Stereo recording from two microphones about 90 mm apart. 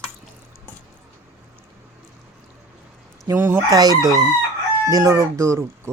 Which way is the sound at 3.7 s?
45° right (ahead or behind).